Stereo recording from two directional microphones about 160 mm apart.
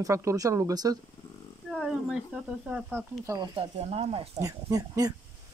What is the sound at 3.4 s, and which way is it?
Speech, 35° right (ahead or behind).